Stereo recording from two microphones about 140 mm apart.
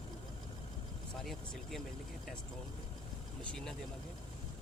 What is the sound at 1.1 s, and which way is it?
Speech, centre (ahead or behind).